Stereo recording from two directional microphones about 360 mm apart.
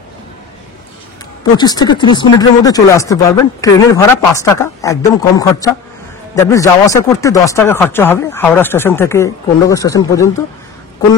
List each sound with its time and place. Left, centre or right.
1.6 s speech: centre